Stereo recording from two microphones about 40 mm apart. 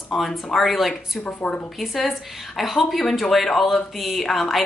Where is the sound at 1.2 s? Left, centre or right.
Left.